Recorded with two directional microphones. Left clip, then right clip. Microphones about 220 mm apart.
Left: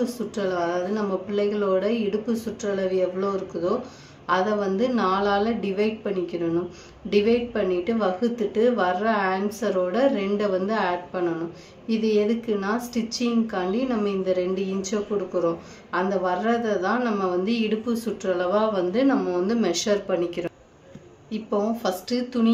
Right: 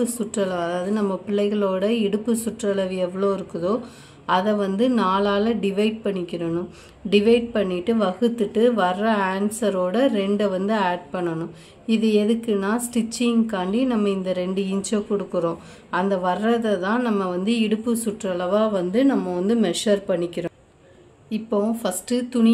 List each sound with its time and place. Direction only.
0.0 s speech: 40° right (ahead or behind)